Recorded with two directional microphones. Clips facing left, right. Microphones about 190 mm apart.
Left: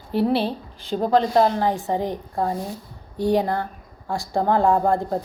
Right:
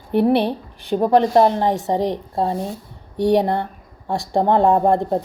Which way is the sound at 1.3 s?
20° right (ahead or behind).